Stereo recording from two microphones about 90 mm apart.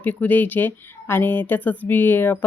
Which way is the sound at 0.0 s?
20° left (ahead or behind).